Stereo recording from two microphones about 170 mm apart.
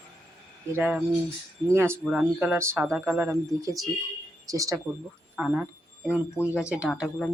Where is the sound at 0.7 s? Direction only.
10° right (ahead or behind).